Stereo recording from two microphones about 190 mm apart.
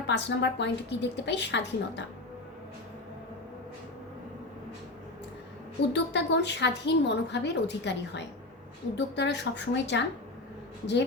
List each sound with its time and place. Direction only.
0.1 s a woman's voice: 65° left (ahead or behind)
5.9 s a woman's voice: 65° left (ahead or behind)